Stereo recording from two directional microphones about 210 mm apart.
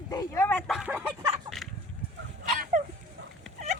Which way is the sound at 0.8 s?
10° right (ahead or behind).